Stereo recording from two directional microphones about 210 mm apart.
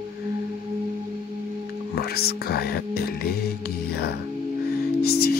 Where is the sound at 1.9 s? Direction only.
50° left (ahead or behind).